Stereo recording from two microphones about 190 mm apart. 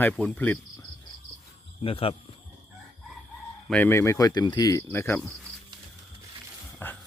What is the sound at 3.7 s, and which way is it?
Speech, 10° left (ahead or behind).